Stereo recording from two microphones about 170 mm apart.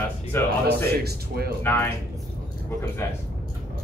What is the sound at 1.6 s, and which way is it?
Speech, 10° left (ahead or behind).